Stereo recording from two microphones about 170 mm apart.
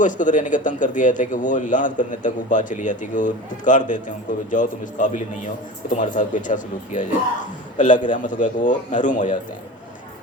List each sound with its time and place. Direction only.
0.0 s a man's voice: 50° left (ahead or behind)